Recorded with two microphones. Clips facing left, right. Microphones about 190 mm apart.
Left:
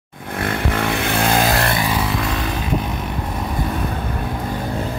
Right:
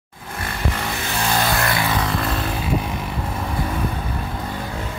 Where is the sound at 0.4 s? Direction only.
55° left (ahead or behind).